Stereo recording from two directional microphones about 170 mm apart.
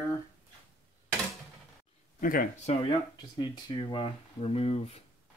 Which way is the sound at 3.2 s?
25° left (ahead or behind).